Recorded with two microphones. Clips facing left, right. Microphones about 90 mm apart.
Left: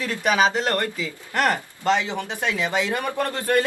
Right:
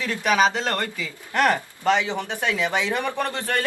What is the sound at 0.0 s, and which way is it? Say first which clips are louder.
A man's voice: even; 5° left (ahead or behind).